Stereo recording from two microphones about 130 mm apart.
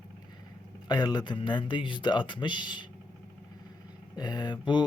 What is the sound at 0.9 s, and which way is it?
Speech, 30° left (ahead or behind).